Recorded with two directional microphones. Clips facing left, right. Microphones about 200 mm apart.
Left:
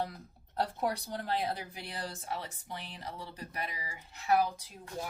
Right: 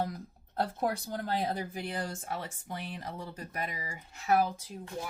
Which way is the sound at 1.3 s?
45° right (ahead or behind).